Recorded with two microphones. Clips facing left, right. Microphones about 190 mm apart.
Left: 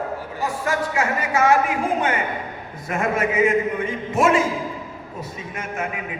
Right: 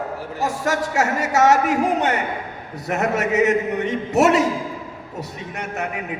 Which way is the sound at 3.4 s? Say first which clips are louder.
Right 1 dB; 75° right (ahead or behind).